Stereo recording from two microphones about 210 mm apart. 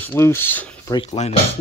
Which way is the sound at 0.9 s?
30° left (ahead or behind).